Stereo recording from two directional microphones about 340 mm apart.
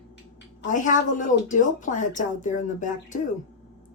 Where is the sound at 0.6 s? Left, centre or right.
Left.